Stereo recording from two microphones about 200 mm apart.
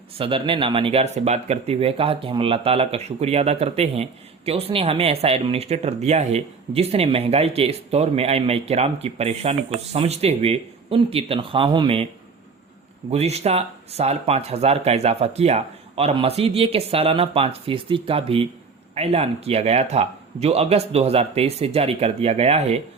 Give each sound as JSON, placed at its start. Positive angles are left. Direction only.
{"t": 0.2, "sound": "speech", "side_deg": -25}
{"t": 13.1, "sound": "speech", "side_deg": -30}